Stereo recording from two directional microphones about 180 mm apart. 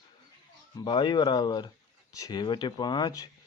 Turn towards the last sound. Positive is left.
turn(degrees=25)  # may be behind; listen again after turning